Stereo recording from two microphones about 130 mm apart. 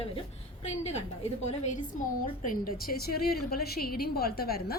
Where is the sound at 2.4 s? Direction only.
90° left.